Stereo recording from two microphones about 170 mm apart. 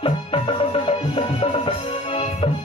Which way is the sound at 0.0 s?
35° left (ahead or behind).